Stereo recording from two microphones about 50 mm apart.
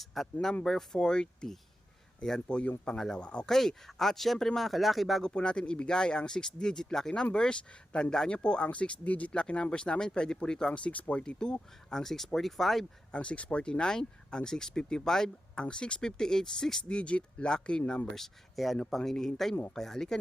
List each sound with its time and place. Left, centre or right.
0.0 s speech: centre; by 3.5 s left
3.5 s speech: centre
5.2 s speech: centre
13.1 s speech: left
16.9 s speech: left
18.1 s speech: centre